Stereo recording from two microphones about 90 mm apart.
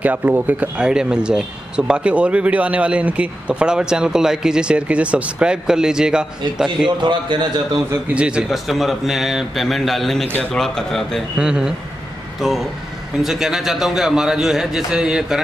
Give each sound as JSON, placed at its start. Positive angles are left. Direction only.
{"t": 0.0, "sound": "speech", "side_deg": -20}
{"t": 7.0, "sound": "a man's voice", "side_deg": -60}
{"t": 8.1, "sound": "speech", "side_deg": -10}
{"t": 8.5, "sound": "a man's voice", "side_deg": 0}
{"t": 11.3, "sound": "a man's voice", "side_deg": -10}